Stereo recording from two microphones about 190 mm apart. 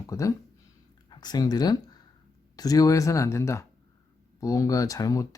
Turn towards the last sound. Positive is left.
turn(degrees=20)  # may be behind; listen again after turning